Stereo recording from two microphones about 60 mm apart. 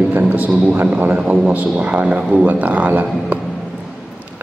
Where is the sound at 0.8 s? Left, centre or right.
Right.